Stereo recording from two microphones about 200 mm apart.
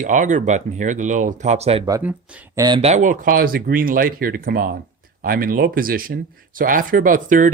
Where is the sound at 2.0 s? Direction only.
10° right (ahead or behind).